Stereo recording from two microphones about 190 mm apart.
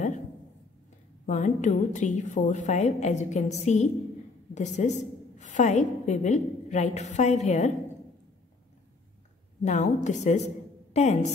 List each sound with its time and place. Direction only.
1.2 s a woman's voice: 40° left (ahead or behind)
9.7 s a woman's voice: 40° left (ahead or behind)
10.9 s a sound: 35° left (ahead or behind)